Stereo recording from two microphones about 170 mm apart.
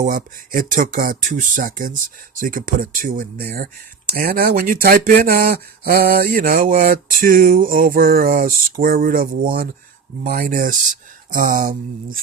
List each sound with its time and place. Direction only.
0.0 s speech: 55° right (ahead or behind)